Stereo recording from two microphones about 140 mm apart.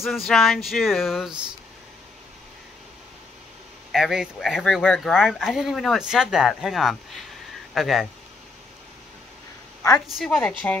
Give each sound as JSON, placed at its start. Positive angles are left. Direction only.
{"t": 0.0, "sound": "speech", "side_deg": 0}
{"t": 3.9, "sound": "speech", "side_deg": -5}
{"t": 10.1, "sound": "speech", "side_deg": 0}
{"t": 10.6, "sound": "speech", "side_deg": 20}